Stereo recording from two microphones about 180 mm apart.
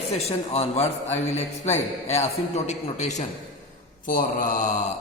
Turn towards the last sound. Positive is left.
turn(degrees=45)  # may be behind; listen again after turning